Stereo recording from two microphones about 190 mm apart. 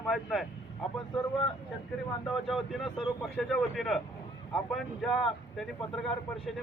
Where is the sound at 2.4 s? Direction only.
Centre (ahead or behind).